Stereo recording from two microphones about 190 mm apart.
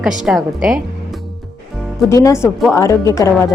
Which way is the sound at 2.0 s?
15° left (ahead or behind).